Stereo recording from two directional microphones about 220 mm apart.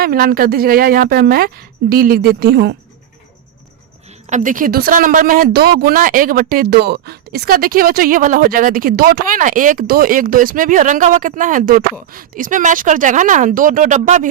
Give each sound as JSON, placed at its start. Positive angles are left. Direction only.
{"t": 0.0, "sound": "a woman's voice", "side_deg": -45}
{"t": 4.3, "sound": "speech", "side_deg": -35}